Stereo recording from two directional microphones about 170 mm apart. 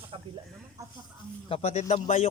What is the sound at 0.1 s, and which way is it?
Snake, 35° right (ahead or behind).